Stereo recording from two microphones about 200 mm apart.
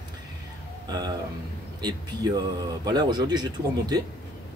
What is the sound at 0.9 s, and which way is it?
Speech, 20° right (ahead or behind).